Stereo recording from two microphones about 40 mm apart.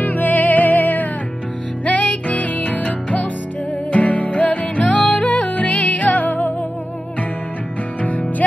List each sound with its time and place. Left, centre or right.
0.0 s music: left
5.2 s music: left
5.5 s music: left
8.0 s music: left